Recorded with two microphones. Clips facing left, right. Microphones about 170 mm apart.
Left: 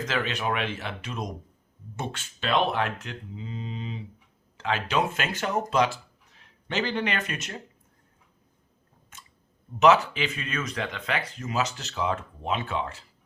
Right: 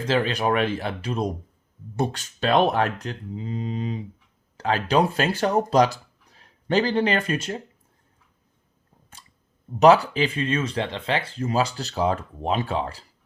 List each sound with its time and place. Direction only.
0.0 s speech: 30° right (ahead or behind)
9.1 s a sound: 35° right (ahead or behind)
9.8 s speech: 35° right (ahead or behind)